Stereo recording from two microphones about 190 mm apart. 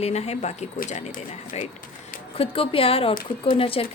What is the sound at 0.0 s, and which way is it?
Speech, 35° left (ahead or behind).